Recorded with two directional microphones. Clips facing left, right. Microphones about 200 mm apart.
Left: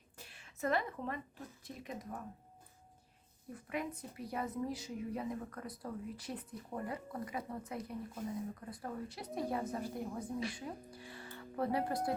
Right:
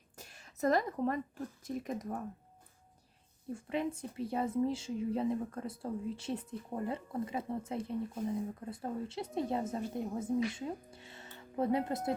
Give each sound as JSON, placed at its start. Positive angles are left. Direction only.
{"t": 0.2, "sound": "a sound", "side_deg": -40}
{"t": 1.6, "sound": "speech", "side_deg": -45}
{"t": 3.5, "sound": "a woman's voice", "side_deg": -25}